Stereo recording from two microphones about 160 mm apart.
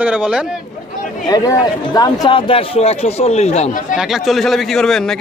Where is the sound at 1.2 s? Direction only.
25° left (ahead or behind); by 3.9 s 50° left (ahead or behind).